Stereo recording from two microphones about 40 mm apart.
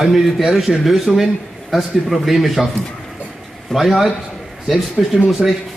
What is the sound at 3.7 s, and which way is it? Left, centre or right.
Speech, centre.